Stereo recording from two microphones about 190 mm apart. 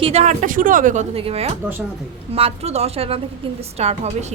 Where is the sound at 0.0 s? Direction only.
35° right (ahead or behind).